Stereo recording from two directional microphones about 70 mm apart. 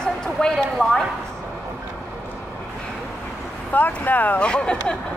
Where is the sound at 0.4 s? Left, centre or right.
Centre.